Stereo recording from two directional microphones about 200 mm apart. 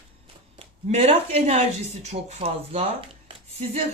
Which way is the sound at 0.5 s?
30° right (ahead or behind).